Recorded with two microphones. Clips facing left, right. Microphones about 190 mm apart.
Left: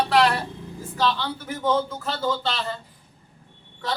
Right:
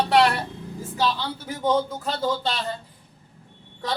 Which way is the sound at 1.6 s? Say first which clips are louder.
Right 1 dB; 15° right (ahead or behind).